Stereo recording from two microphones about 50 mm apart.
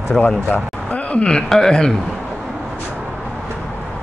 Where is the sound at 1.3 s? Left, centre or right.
Centre.